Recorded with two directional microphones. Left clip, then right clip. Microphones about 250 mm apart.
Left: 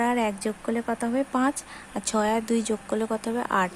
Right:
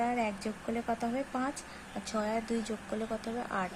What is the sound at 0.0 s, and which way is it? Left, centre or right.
Speech, left.